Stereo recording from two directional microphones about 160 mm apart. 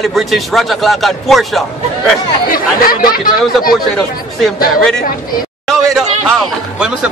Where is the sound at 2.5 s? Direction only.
65° left (ahead or behind).